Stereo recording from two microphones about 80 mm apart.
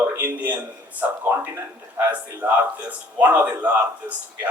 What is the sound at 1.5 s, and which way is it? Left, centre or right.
A man's voice, right.